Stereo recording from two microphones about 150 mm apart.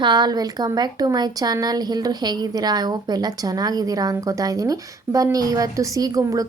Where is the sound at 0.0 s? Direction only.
30° right (ahead or behind).